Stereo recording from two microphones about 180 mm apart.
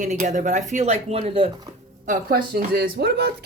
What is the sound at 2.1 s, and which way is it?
Speech, 55° right (ahead or behind).